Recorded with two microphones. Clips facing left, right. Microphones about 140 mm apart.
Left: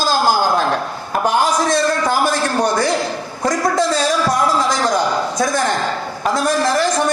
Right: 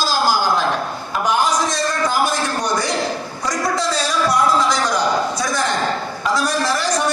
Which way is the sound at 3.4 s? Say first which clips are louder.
Left 5 dB; 50° left (ahead or behind).